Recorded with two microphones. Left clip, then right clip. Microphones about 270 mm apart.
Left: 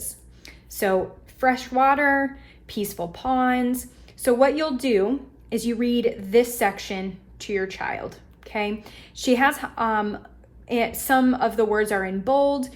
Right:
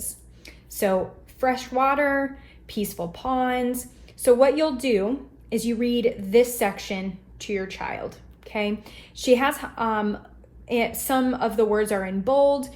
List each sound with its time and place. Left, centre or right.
0.0 s a woman's voice: left